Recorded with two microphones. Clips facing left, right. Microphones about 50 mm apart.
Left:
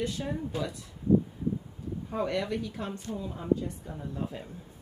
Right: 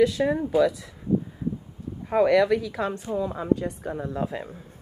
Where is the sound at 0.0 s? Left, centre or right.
Right.